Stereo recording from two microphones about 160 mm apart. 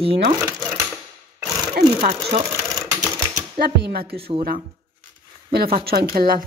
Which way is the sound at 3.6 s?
75° right (ahead or behind).